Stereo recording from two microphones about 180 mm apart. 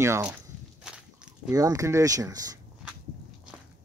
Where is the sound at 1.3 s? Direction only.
20° right (ahead or behind).